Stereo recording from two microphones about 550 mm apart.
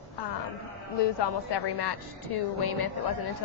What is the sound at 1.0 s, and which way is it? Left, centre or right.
A woman's voice, left.